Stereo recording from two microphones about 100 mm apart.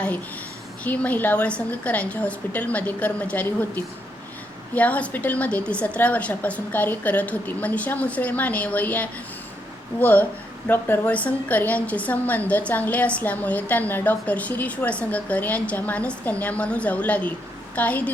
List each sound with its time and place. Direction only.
0.9 s a woman's voice: 15° left (ahead or behind)